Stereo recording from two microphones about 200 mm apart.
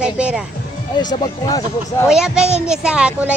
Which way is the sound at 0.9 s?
20° left (ahead or behind).